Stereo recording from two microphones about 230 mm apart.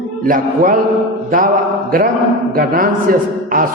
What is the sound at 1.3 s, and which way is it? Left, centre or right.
Mantra, right.